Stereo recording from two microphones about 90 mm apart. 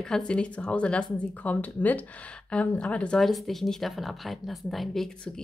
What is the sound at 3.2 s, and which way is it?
Speech, centre (ahead or behind).